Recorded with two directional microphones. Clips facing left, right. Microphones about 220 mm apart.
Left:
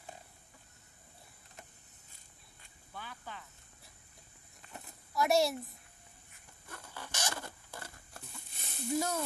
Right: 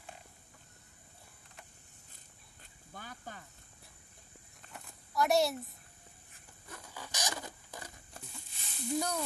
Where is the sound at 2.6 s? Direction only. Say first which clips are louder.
Left 1 dB; 45° right (ahead or behind).